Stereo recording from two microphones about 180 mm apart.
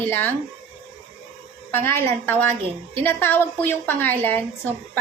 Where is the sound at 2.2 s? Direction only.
10° left (ahead or behind).